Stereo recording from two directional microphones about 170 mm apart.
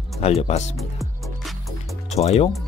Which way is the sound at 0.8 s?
Centre (ahead or behind).